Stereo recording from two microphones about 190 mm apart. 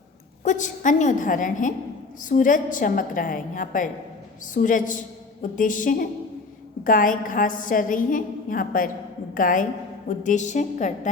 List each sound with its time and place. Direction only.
0.4 s a woman's voice: 40° left (ahead or behind)